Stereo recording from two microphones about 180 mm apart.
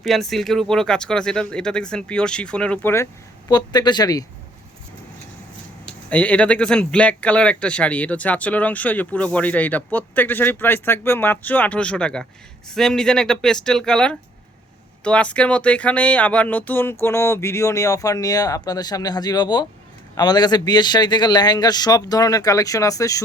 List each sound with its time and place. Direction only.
0.0 s speech: centre (ahead or behind)
3.5 s a man's voice: 25° left (ahead or behind)
6.1 s a man's voice: 5° left (ahead or behind)